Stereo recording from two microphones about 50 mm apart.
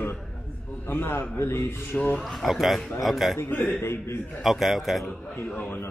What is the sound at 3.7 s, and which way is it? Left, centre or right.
Speech, left.